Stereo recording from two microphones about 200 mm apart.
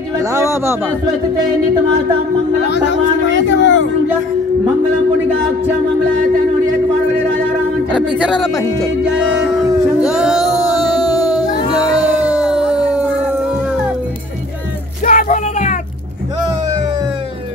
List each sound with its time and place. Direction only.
0.2 s speech: 15° right (ahead or behind)
2.6 s a man's voice: 60° left (ahead or behind)
8.2 s speech: centre (ahead or behind)
9.9 s music: 5° right (ahead or behind)
12.2 s howl: 5° right (ahead or behind)
15.0 s a sound: 40° left (ahead or behind)